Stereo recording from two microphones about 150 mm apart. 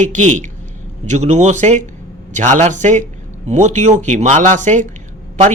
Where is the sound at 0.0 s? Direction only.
55° right (ahead or behind).